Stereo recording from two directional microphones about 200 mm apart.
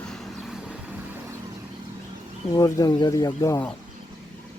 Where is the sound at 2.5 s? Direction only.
20° left (ahead or behind).